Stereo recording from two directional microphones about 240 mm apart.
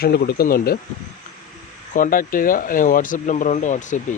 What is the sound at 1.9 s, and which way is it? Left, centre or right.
Speech, left.